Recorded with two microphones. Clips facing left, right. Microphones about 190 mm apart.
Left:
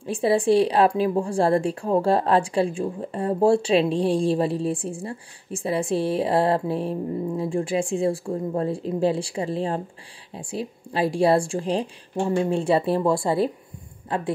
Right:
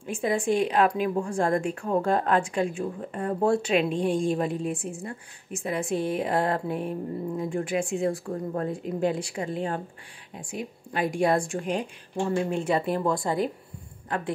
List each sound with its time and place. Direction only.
0.0 s speech: 35° left (ahead or behind)